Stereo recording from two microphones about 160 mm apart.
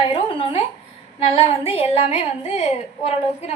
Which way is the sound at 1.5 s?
35° left (ahead or behind).